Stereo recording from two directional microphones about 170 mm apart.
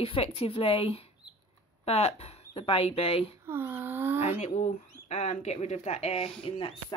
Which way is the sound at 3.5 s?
10° right (ahead or behind).